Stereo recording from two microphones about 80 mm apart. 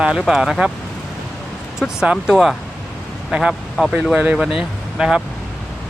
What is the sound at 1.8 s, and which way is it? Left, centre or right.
Speech, centre.